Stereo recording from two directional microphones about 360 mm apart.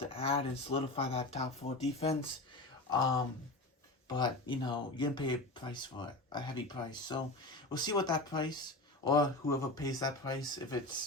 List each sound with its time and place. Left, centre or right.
0.0 s speech: centre